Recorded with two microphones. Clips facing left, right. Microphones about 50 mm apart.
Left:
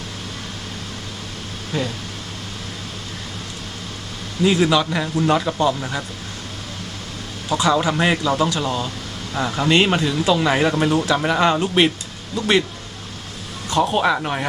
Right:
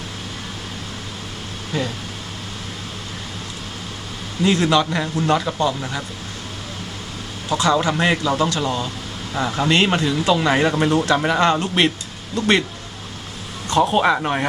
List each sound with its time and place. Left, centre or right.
1.7 s speech: centre
4.4 s speech: centre
7.5 s speech: centre
13.7 s speech: centre